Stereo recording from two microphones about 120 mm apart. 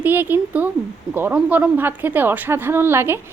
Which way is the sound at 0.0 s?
15° right (ahead or behind).